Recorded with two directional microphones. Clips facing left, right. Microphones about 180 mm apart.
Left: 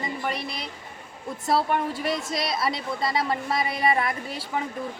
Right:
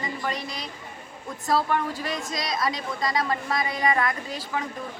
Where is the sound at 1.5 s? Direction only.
25° left (ahead or behind).